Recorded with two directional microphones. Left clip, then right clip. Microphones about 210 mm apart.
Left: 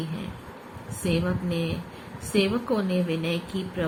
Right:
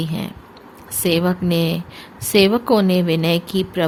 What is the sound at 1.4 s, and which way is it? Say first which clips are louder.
A woman's voice: right 10 dB; 65° right (ahead or behind).